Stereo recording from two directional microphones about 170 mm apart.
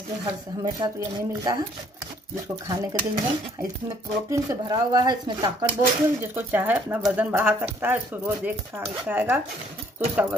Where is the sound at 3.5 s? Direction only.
15° right (ahead or behind).